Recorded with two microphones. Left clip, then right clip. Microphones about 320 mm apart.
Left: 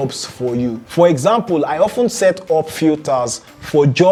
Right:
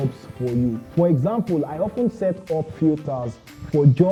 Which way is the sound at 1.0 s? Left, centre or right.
Centre.